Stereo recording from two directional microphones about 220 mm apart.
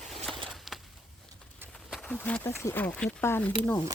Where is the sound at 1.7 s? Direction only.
5° left (ahead or behind).